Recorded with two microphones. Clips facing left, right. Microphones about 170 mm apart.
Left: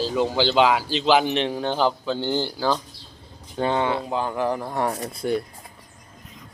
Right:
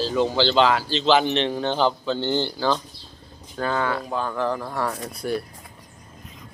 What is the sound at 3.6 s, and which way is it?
Speech, 25° left (ahead or behind).